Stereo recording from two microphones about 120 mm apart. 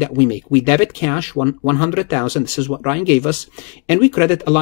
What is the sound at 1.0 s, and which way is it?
Speech, 15° left (ahead or behind).